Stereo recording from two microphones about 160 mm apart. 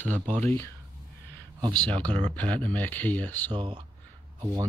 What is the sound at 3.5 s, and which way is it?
Speech, 30° right (ahead or behind).